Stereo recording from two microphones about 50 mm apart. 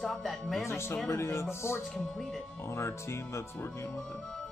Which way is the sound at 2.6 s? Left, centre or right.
Left.